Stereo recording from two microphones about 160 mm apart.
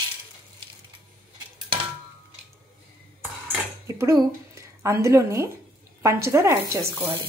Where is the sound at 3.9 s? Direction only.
20° right (ahead or behind).